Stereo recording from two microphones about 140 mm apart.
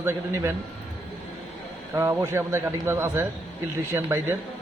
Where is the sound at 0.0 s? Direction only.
15° right (ahead or behind).